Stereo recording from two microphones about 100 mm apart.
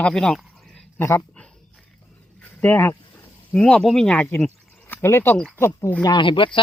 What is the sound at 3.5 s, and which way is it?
Speech, 10° left (ahead or behind).